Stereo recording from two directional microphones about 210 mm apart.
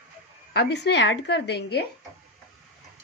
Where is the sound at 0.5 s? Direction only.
55° left (ahead or behind).